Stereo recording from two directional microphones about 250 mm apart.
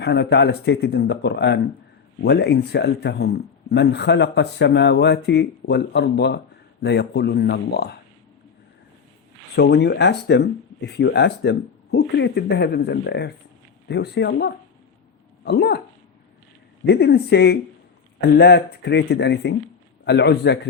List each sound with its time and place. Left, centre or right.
0.0 s speech: left
9.6 s speech: left
16.8 s a man's voice: left